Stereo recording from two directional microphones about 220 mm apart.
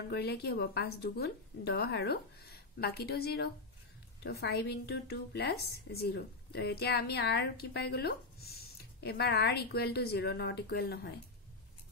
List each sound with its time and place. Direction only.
0.1 s a woman's voice: 45° left (ahead or behind)